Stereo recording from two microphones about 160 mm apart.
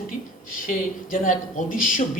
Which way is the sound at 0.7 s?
60° left (ahead or behind).